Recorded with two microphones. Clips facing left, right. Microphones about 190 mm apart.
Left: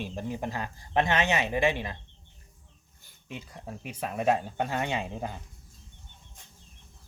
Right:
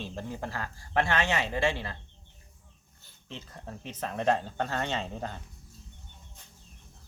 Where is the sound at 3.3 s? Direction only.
10° left (ahead or behind).